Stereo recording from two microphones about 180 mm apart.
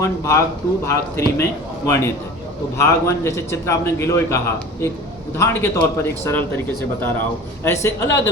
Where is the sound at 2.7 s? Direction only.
15° left (ahead or behind).